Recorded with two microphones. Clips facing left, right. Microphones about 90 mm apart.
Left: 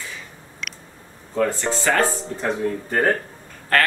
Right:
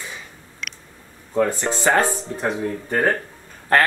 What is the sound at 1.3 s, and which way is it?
Speech, 15° right (ahead or behind).